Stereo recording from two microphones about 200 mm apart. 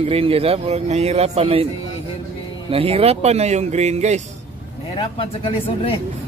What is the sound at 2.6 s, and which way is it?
Speech, 30° right (ahead or behind).